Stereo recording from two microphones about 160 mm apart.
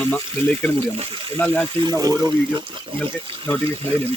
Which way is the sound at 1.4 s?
15° left (ahead or behind).